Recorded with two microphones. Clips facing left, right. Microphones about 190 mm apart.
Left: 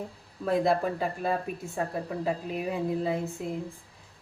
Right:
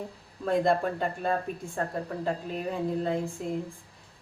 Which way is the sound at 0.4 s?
5° left (ahead or behind).